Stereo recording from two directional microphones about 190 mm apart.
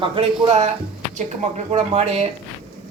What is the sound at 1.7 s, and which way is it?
Speech, 35° right (ahead or behind).